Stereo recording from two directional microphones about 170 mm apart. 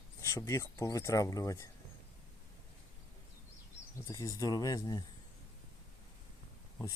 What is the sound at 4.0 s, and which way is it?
Speech, 20° left (ahead or behind).